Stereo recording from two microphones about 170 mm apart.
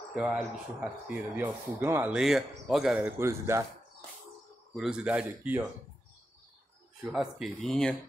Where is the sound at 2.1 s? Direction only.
Centre (ahead or behind).